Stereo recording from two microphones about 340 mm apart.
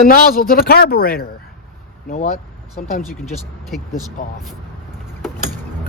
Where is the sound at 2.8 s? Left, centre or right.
Left.